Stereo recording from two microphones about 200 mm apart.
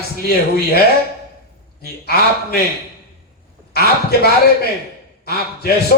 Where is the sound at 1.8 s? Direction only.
50° left (ahead or behind).